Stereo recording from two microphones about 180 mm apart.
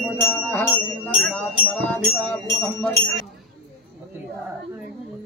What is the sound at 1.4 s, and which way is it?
Speech, 10° left (ahead or behind).